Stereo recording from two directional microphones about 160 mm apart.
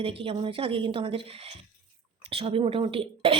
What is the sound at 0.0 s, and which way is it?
A woman's voice, 35° right (ahead or behind).